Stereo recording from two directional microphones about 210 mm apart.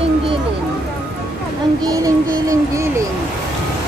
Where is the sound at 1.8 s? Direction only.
15° right (ahead or behind).